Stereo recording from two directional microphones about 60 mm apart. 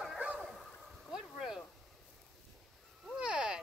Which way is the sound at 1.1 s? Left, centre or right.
Centre.